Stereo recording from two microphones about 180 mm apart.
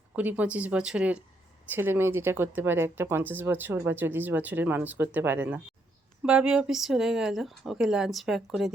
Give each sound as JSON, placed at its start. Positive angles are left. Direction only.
{"t": 0.2, "sound": "speech", "side_deg": -10}